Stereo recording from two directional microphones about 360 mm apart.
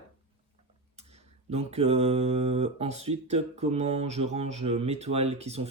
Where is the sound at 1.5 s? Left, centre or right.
Centre.